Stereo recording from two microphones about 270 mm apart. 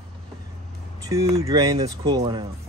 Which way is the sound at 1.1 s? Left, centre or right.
Centre.